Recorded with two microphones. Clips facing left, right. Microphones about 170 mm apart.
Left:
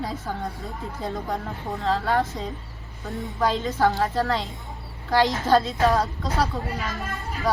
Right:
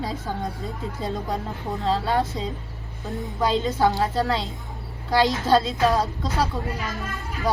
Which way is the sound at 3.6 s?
10° right (ahead or behind).